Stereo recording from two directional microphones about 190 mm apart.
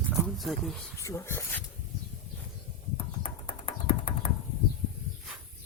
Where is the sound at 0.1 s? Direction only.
Centre (ahead or behind).